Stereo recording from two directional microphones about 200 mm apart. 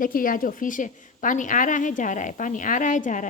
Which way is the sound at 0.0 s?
45° left (ahead or behind).